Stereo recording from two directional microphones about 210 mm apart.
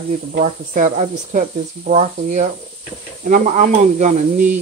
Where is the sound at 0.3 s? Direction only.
35° right (ahead or behind).